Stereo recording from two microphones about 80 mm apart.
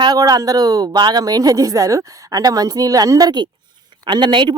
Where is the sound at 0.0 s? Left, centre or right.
Right.